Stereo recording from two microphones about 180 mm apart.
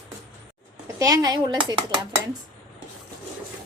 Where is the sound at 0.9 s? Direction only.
20° right (ahead or behind).